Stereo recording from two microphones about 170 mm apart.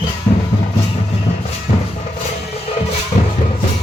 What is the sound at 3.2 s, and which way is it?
Music, 40° left (ahead or behind).